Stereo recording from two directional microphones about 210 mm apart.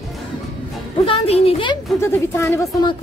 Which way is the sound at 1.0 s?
30° left (ahead or behind).